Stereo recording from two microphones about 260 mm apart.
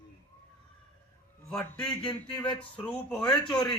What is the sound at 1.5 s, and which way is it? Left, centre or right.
A man's voice, centre.